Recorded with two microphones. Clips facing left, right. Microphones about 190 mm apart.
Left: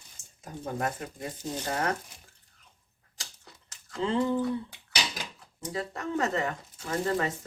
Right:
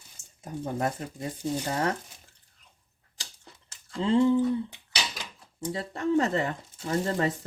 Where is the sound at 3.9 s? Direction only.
30° right (ahead or behind).